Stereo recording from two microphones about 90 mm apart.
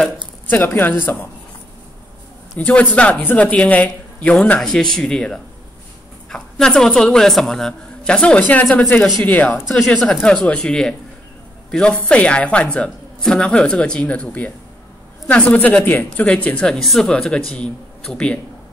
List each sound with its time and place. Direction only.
0.5 s speech: 20° left (ahead or behind)
2.6 s speech: 15° left (ahead or behind)
9.7 s speech: centre (ahead or behind)